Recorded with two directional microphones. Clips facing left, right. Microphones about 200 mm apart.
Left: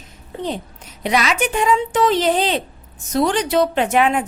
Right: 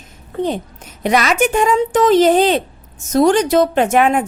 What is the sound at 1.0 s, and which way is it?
A woman's voice, 50° right (ahead or behind).